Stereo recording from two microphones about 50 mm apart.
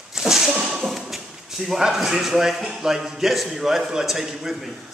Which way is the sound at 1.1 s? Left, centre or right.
Centre.